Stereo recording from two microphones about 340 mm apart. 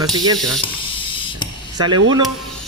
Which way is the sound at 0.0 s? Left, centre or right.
Centre.